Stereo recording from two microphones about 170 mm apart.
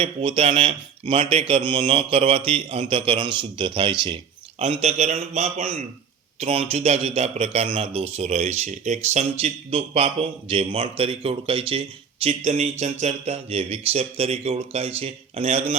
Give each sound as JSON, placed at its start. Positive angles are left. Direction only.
{"t": 0.0, "sound": "a man's voice", "side_deg": -35}